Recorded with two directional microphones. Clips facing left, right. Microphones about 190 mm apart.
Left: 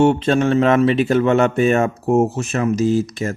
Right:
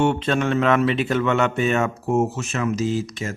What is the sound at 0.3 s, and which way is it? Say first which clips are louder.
Speech: left 5 dB; 35° left (ahead or behind).